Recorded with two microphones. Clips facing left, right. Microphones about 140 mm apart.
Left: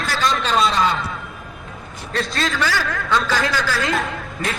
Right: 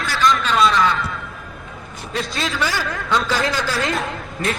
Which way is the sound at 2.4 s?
20° right (ahead or behind).